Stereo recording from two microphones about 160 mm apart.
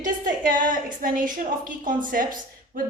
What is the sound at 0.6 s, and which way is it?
A woman's voice, 55° right (ahead or behind).